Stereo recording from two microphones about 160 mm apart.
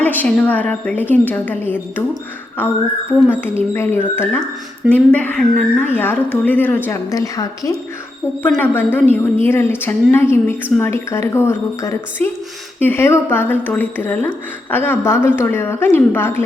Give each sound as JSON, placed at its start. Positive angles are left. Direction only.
{"t": 0.0, "sound": "speech", "side_deg": 10}